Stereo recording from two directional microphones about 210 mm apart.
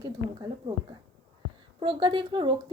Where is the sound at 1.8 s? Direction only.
20° right (ahead or behind).